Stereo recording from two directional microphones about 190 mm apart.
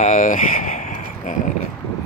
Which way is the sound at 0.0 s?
45° left (ahead or behind).